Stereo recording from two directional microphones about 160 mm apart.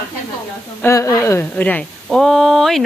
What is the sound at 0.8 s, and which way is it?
Speech, 20° left (ahead or behind).